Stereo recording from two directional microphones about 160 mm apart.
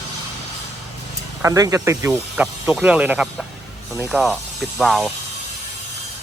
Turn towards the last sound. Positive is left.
turn(degrees=0)  # may be behind; listen again after turning